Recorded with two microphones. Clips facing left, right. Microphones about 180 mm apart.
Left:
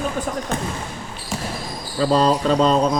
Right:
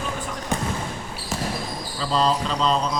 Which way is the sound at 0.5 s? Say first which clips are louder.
Right 2 dB; 15° right (ahead or behind).